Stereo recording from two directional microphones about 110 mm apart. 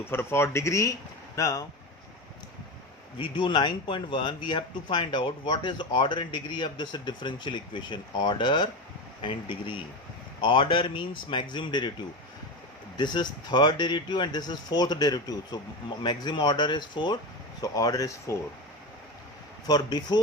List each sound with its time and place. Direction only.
0.0 s speech: 20° left (ahead or behind)
3.2 s speech: 45° left (ahead or behind)
13.0 s speech: 40° left (ahead or behind)
17.6 s speech: 35° left (ahead or behind)
19.6 s speech: 40° left (ahead or behind)